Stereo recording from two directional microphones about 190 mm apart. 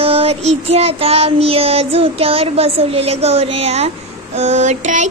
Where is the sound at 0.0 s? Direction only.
30° right (ahead or behind).